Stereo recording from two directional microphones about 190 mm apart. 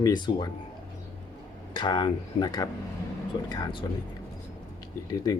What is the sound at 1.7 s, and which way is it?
Speech, 25° left (ahead or behind).